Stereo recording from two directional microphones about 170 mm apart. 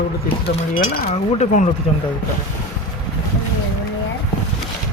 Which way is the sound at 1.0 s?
40° left (ahead or behind).